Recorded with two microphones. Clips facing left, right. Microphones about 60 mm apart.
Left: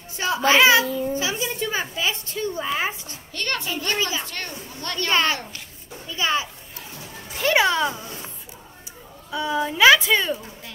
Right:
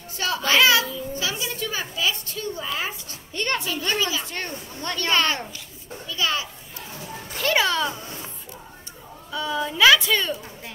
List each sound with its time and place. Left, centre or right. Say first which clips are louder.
0.2 s a child's voice: left 3 dB; left
1.1 s a sound: left 3 dB; left
3.3 s a child's voice: right 2 dB; right
4.0 s a child's voice: even; left
4.3 s speech: right 1 dB; right
5.1 s a woman's voice: left 1 dB; centre
6.0 s a child's voice: left 2 dB; left
9.3 s a woman's voice: left 2 dB; centre